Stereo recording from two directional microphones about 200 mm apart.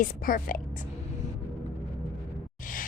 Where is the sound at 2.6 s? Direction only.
40° left (ahead or behind).